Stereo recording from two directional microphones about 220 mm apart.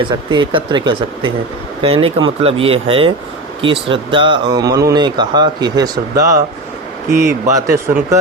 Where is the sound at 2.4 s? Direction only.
25° right (ahead or behind).